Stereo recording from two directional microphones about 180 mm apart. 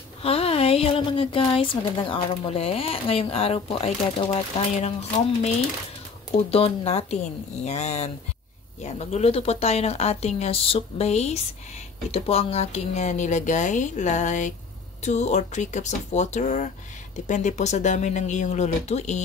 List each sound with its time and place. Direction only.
0.2 s a woman's voice: 35° left (ahead or behind)
6.3 s a woman's voice: 35° left (ahead or behind)